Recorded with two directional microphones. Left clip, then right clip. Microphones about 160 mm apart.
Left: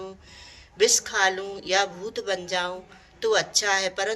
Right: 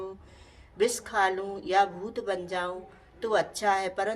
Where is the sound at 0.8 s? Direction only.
35° right (ahead or behind).